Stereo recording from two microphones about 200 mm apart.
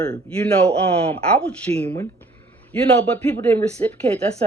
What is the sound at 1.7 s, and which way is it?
Speech, 30° right (ahead or behind).